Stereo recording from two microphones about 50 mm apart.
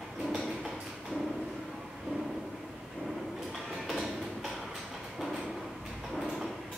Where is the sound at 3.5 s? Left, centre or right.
Centre.